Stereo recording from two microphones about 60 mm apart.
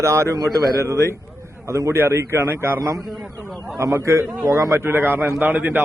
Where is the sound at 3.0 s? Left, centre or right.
Centre.